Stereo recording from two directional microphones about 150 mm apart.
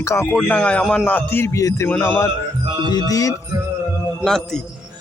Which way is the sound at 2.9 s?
25° left (ahead or behind).